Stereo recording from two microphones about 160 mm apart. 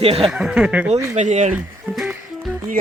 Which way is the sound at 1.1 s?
45° right (ahead or behind).